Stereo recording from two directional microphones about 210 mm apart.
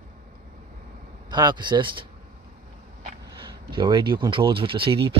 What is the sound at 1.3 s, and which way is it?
Speech, 20° right (ahead or behind).